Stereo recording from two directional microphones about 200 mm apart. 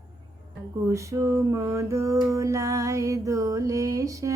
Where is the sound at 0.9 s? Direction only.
15° right (ahead or behind).